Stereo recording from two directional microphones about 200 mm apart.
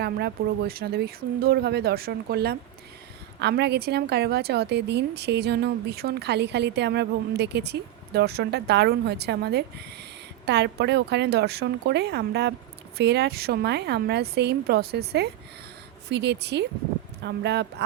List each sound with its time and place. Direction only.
0.0 s a woman's voice: 55° right (ahead or behind)